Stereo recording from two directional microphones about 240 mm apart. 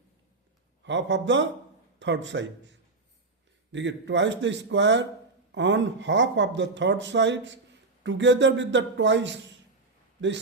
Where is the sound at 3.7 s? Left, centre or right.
Right.